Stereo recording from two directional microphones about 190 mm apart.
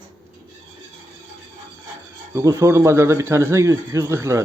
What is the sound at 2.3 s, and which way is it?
Speech, 15° right (ahead or behind).